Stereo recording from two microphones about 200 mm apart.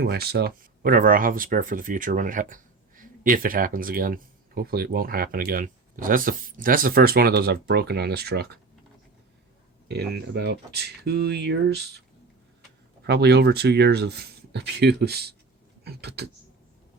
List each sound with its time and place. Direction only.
0.0 s speech: 50° right (ahead or behind)
9.9 s speech: 55° right (ahead or behind)
13.1 s speech: 55° right (ahead or behind)